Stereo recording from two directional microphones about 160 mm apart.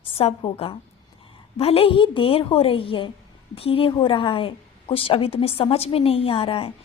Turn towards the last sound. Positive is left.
turn(degrees=35)  # may be behind; listen again after turning